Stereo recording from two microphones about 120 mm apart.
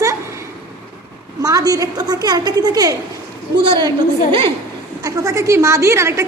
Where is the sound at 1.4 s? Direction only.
30° right (ahead or behind).